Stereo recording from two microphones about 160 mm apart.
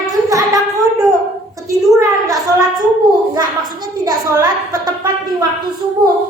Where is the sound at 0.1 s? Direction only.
20° right (ahead or behind).